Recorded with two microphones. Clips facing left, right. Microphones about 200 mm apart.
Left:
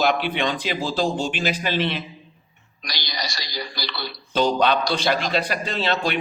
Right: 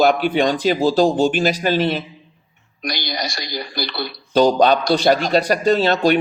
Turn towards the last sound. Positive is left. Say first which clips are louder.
# right 9 dB
turn(degrees=-40)  # may be behind; listen again after turning